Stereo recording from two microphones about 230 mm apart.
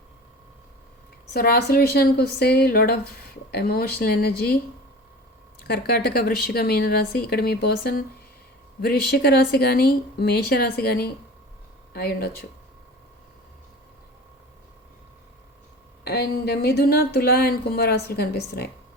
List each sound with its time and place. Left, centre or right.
1.3 s speech: left
5.6 s speech: left
16.0 s speech: left